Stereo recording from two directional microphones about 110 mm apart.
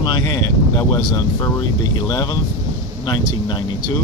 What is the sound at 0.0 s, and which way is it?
A man's voice, 40° left (ahead or behind).